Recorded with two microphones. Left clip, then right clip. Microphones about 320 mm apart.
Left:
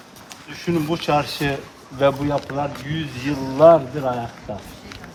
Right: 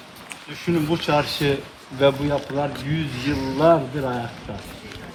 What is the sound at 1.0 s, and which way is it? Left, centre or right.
Speech, centre.